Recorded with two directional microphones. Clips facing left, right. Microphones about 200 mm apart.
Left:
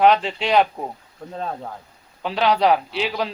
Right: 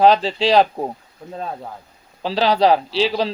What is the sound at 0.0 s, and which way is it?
Speech, 35° right (ahead or behind).